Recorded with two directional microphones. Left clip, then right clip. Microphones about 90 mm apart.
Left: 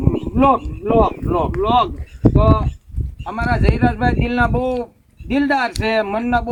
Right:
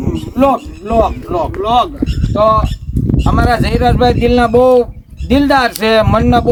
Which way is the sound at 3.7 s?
30° right (ahead or behind).